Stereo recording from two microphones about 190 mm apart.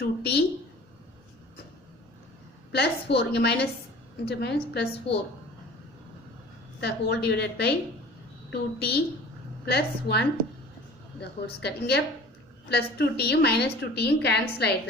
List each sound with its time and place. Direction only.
0.0 s a woman's voice: 60° left (ahead or behind)
2.7 s a woman's voice: 60° left (ahead or behind)
6.8 s a woman's voice: 60° left (ahead or behind)